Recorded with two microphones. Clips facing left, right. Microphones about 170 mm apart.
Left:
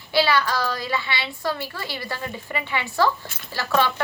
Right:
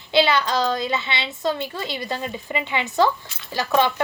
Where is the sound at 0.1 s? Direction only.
20° right (ahead or behind).